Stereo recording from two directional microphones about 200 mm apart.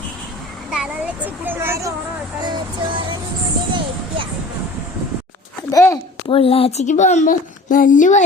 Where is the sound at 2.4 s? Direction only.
25° right (ahead or behind).